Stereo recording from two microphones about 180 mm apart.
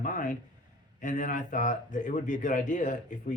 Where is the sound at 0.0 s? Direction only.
50° left (ahead or behind).